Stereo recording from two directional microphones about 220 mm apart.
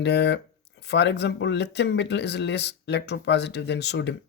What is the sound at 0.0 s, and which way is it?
Speech, 50° left (ahead or behind).